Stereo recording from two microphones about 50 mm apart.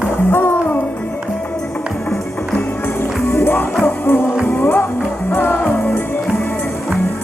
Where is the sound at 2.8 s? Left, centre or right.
Left.